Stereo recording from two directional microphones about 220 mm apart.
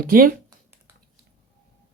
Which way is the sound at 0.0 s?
40° right (ahead or behind).